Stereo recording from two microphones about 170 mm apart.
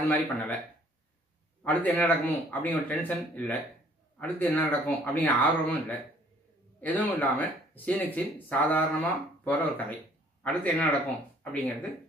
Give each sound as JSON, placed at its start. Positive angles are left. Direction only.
{"t": 0.1, "sound": "speech", "side_deg": 10}
{"t": 1.6, "sound": "speech", "side_deg": 10}